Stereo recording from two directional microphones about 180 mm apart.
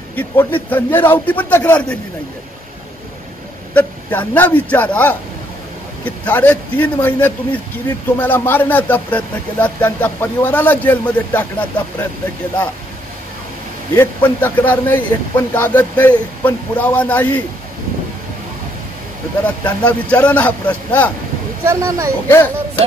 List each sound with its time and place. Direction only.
0.1 s speech: 10° left (ahead or behind)
3.7 s speech: 10° left (ahead or behind)
13.9 s speech: 10° left (ahead or behind)
19.4 s speech: 10° left (ahead or behind)
21.6 s speech: 15° right (ahead or behind)